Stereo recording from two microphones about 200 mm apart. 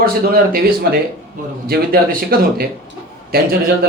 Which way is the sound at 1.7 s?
50° right (ahead or behind).